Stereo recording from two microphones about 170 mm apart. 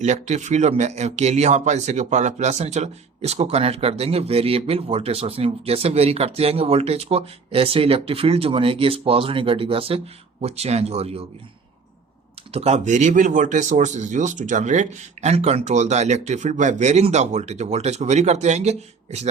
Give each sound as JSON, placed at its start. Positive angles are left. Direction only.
{"t": 0.0, "sound": "speech", "side_deg": -40}
{"t": 12.5, "sound": "speech", "side_deg": -40}